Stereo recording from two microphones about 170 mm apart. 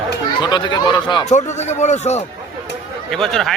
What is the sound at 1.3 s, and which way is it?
Speech, 40° left (ahead or behind).